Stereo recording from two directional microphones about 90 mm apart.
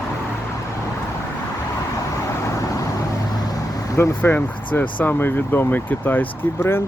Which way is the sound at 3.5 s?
35° left (ahead or behind).